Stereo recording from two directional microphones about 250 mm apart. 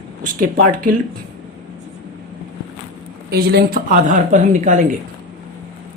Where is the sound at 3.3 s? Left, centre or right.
Right.